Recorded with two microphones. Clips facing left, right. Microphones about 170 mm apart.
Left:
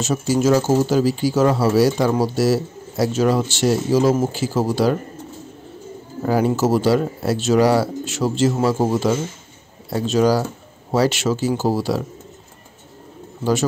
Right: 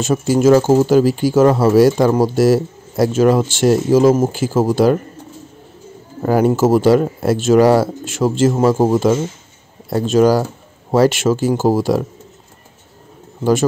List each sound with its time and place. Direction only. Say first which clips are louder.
0.0 s speech: right 5 dB; 55° right (ahead or behind)
6.2 s speech: right 4 dB; 50° right (ahead or behind)
13.4 s speech: right 5 dB; 50° right (ahead or behind)